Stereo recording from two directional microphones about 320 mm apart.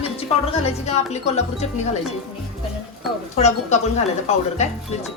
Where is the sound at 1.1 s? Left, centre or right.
Left.